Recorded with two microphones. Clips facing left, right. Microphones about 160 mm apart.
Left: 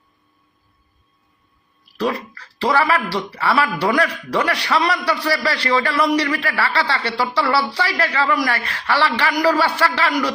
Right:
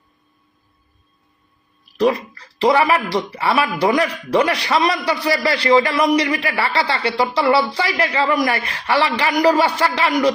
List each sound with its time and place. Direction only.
2.0 s a man's voice: 20° right (ahead or behind)